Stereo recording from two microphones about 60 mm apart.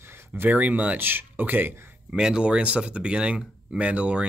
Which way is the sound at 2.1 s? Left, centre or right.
Centre.